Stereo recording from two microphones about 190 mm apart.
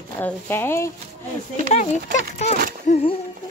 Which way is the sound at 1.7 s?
40° left (ahead or behind).